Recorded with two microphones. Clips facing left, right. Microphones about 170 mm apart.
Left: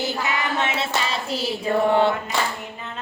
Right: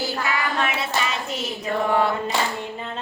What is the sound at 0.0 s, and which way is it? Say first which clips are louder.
Hands: even; 20° left (ahead or behind).